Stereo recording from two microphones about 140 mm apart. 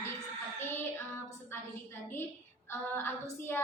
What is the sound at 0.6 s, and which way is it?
A woman's voice, 15° left (ahead or behind).